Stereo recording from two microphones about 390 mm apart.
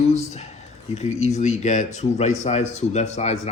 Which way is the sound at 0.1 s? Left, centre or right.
Centre.